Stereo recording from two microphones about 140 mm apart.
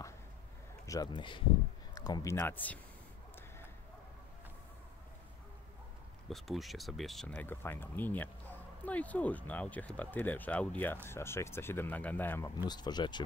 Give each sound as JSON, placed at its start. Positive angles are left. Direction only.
{"t": 0.8, "sound": "speech", "side_deg": 25}
{"t": 6.2, "sound": "speech", "side_deg": 0}
{"t": 12.5, "sound": "speech", "side_deg": 30}